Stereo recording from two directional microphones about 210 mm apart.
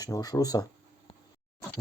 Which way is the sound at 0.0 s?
15° left (ahead or behind).